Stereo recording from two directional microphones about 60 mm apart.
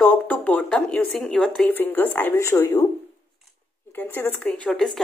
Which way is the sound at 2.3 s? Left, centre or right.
Left.